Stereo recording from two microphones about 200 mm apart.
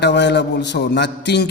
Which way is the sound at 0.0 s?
60° left (ahead or behind).